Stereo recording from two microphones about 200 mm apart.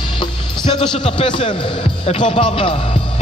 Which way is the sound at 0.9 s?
25° left (ahead or behind).